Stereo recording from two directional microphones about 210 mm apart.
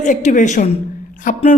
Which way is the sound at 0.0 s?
35° left (ahead or behind).